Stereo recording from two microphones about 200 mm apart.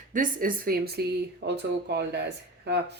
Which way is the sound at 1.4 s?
60° right (ahead or behind).